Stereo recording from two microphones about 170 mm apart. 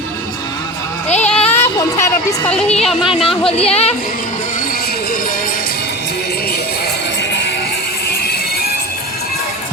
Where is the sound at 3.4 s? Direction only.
35° left (ahead or behind).